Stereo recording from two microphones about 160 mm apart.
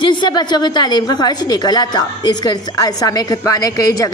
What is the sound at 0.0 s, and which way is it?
A woman's voice, 30° left (ahead or behind).